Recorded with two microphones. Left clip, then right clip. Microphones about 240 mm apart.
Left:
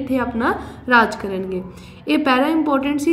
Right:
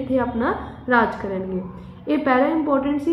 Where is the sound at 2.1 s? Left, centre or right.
Left.